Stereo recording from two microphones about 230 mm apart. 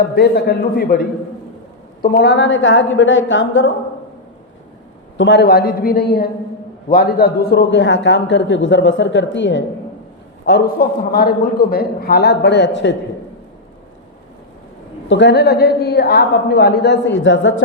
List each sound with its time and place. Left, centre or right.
0.0 s a man's voice: left
5.1 s a man's voice: left
15.0 s a man's voice: left